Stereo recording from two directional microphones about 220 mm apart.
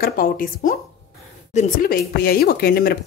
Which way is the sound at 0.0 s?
40° left (ahead or behind).